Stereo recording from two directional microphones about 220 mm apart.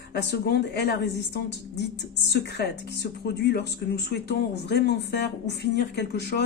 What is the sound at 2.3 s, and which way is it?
Speech, 50° left (ahead or behind).